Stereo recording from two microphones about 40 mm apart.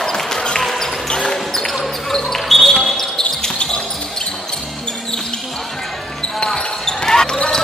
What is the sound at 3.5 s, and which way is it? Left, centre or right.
Basketball bounce, left.